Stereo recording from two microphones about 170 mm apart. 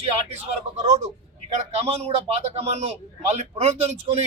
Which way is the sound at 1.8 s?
35° right (ahead or behind).